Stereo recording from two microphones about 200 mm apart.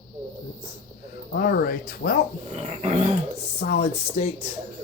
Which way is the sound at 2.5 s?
35° right (ahead or behind).